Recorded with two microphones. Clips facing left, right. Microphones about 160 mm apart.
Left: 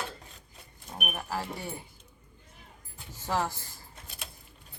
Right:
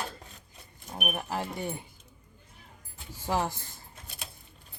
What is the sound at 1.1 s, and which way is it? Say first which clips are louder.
Speech: even; 20° right (ahead or behind).